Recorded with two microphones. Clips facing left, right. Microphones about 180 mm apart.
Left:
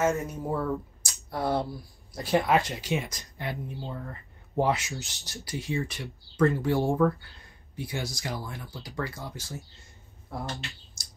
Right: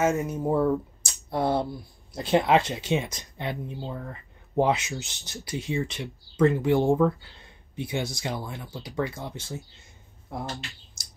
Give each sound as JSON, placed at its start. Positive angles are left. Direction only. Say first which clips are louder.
{"t": 0.0, "sound": "speech", "louder": "right 3 dB", "side_deg": -20}